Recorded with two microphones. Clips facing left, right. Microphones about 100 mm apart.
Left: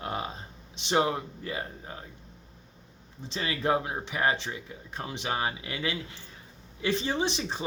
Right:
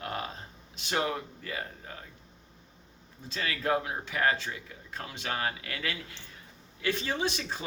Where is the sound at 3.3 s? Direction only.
25° left (ahead or behind).